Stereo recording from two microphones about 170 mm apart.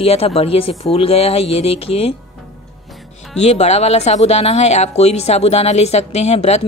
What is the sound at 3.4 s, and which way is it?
Speech, 40° left (ahead or behind).